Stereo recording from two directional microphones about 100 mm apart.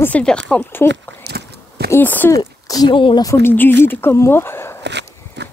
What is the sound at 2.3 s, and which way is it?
Speech, 35° left (ahead or behind).